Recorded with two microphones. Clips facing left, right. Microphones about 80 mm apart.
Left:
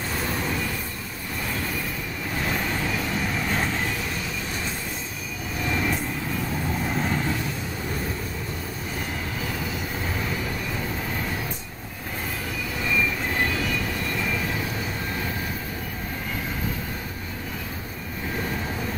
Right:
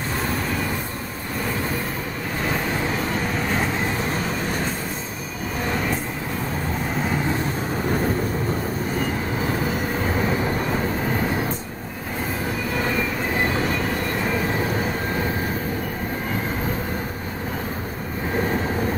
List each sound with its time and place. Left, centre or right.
3.8 s vehicle: right
9.5 s vehicle: right
12.7 s train: right
13.4 s vehicle: right